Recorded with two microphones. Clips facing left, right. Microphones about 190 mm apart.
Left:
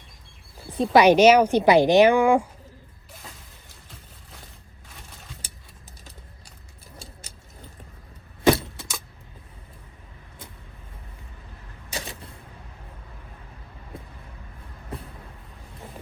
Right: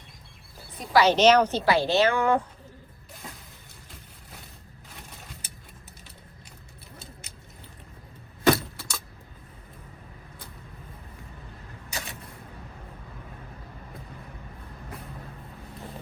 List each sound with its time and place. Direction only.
0.9 s a woman's voice: 15° left (ahead or behind)
8.5 s keys jangling: 20° left (ahead or behind)
11.9 s a sound: 30° left (ahead or behind)
14.9 s vehicle: 30° left (ahead or behind)